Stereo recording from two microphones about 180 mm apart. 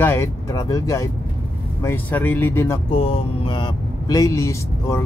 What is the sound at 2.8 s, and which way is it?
Speech, 30° left (ahead or behind).